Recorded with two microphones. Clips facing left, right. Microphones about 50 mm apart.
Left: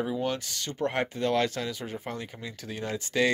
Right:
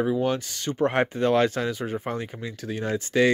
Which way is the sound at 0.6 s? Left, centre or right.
Right.